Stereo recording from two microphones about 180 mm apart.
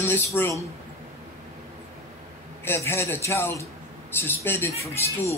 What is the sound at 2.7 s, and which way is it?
Speech, 15° left (ahead or behind).